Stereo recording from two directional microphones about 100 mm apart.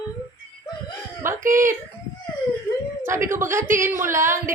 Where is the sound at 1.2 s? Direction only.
30° right (ahead or behind).